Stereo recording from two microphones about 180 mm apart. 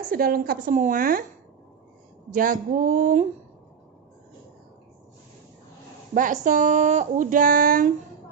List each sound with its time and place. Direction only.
0.1 s speech: 55° right (ahead or behind)
2.3 s speech: 50° right (ahead or behind)
6.1 s speech: 45° right (ahead or behind)